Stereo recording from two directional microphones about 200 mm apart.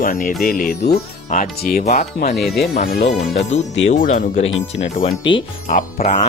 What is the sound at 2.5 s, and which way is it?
Speech, 50° left (ahead or behind).